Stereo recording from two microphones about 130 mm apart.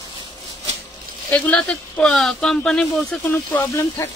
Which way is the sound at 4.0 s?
20° left (ahead or behind).